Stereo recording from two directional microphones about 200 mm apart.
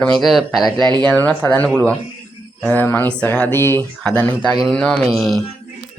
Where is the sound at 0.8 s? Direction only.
20° right (ahead or behind).